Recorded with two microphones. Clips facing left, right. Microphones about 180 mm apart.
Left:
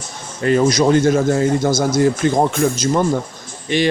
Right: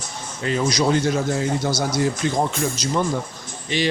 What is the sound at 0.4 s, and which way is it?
Speech, 50° left (ahead or behind).